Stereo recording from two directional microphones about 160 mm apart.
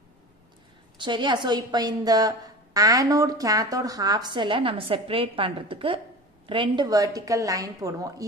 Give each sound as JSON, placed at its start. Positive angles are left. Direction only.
{"t": 0.9, "sound": "a woman's voice", "side_deg": -30}